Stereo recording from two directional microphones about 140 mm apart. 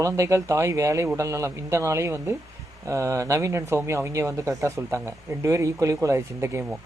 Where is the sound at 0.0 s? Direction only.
20° right (ahead or behind).